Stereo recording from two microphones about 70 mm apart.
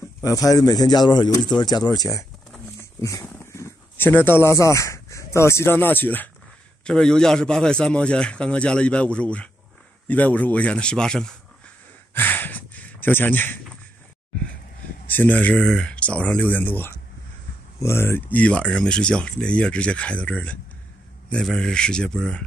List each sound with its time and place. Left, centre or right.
0.2 s speech: left
2.8 s wild animals: left
3.3 s dog: left
3.9 s speech: left
6.8 s a man's voice: centre
12.1 s a sound: left
15.0 s speech: left
15.6 s speech: centre; by 16.9 s left
17.7 s speech: left
18.3 s a man's voice: centre
21.5 s a man's voice: centre